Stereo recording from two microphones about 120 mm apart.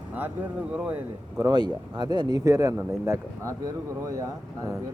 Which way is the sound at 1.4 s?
35° right (ahead or behind).